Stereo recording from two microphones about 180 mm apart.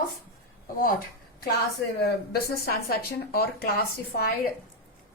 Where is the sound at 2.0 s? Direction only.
60° left (ahead or behind).